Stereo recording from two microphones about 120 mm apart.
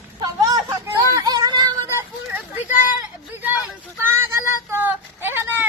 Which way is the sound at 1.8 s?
20° right (ahead or behind).